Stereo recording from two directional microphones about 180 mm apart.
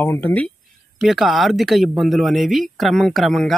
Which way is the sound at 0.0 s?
10° left (ahead or behind).